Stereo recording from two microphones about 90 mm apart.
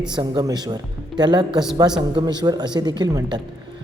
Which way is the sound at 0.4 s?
55° right (ahead or behind).